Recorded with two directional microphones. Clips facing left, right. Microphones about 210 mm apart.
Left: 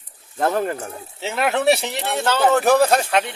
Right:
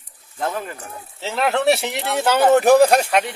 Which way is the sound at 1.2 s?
5° left (ahead or behind).